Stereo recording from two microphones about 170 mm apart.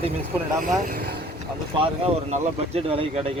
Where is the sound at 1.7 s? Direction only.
35° right (ahead or behind).